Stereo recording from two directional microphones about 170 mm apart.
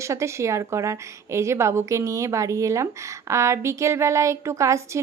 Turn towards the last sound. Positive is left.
turn(degrees=-15)  # may be behind; listen again after turning